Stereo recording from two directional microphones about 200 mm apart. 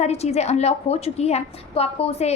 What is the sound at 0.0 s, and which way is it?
A woman's voice, 30° left (ahead or behind).